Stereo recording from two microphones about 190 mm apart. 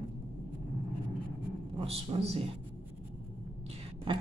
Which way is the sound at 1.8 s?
30° right (ahead or behind).